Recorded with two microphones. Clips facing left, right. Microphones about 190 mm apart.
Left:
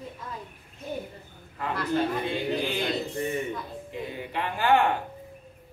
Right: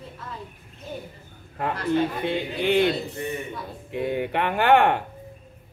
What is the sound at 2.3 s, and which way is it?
Speech, 65° right (ahead or behind).